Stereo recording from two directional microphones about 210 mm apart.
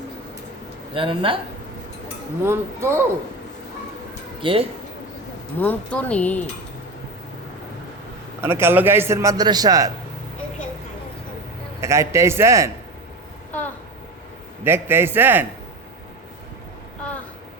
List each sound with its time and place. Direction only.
0.9 s speech: 25° right (ahead or behind)
2.4 s a man's voice: 10° right (ahead or behind)
4.4 s speech: 25° right (ahead or behind)
5.5 s speech: 10° left (ahead or behind)
8.4 s a man's voice: 10° right (ahead or behind)
11.8 s a man's voice: 15° right (ahead or behind)
14.6 s a man's voice: 10° right (ahead or behind)